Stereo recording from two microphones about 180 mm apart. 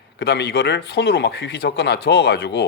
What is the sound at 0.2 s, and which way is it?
Speech, 65° left (ahead or behind).